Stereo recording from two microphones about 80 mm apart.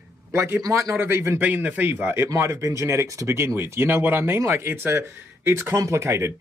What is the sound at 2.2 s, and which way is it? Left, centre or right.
Speech, right.